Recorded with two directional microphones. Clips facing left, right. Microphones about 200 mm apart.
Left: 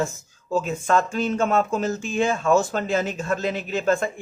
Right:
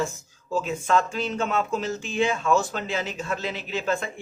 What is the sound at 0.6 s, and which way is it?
Speech, 45° left (ahead or behind).